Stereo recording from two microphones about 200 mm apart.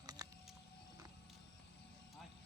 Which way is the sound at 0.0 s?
20° right (ahead or behind).